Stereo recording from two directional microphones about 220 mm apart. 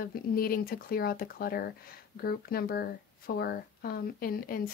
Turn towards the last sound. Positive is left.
turn(degrees=40)  # may be behind; listen again after turning